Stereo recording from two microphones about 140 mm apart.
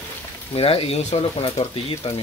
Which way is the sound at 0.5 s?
45° left (ahead or behind).